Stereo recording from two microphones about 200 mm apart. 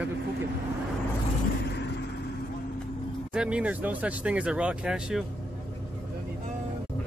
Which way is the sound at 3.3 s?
5° right (ahead or behind).